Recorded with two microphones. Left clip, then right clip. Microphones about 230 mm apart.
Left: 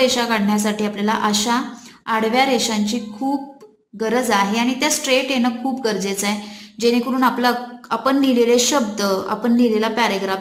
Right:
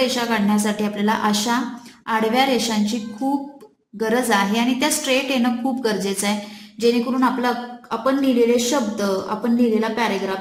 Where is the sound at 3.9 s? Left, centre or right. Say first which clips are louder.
Left 1 dB; centre.